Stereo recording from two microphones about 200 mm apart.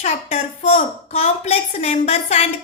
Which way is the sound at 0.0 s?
30° left (ahead or behind).